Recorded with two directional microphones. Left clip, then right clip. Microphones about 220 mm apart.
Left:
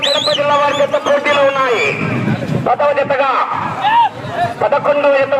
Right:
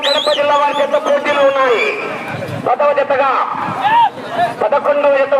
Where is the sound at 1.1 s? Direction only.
5° left (ahead or behind).